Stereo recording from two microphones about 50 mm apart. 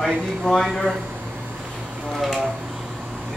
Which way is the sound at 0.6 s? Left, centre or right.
Centre.